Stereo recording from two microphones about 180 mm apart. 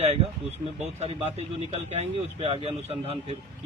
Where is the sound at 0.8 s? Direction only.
40° right (ahead or behind).